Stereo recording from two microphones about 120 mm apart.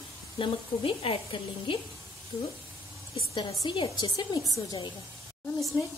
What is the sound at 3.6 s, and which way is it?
A woman's voice, 40° left (ahead or behind).